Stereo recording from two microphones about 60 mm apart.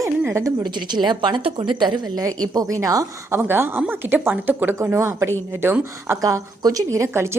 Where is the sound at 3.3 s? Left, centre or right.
Right.